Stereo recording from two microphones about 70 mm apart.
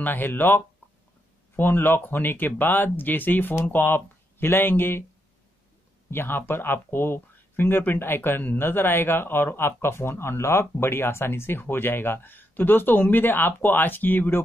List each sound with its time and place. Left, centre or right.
0.0 s speech: left
6.0 s speech: left